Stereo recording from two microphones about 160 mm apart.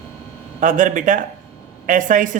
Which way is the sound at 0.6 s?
55° right (ahead or behind).